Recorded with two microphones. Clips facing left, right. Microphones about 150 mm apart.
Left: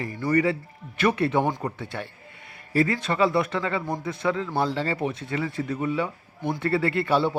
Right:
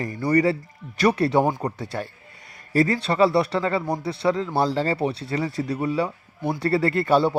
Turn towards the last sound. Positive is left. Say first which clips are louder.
# right 3 dB
turn(degrees=-40)  # may be behind; listen again after turning